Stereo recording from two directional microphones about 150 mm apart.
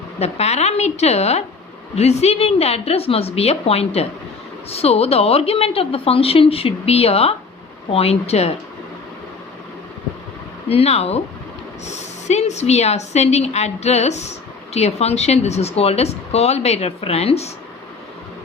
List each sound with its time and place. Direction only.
0.2 s a woman's voice: 45° left (ahead or behind)
10.7 s a woman's voice: 45° left (ahead or behind)